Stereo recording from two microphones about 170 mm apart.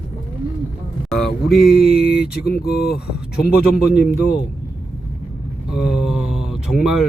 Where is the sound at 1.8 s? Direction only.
65° left (ahead or behind).